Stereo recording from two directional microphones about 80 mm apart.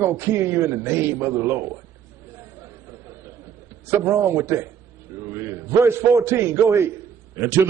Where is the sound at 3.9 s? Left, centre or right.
Right.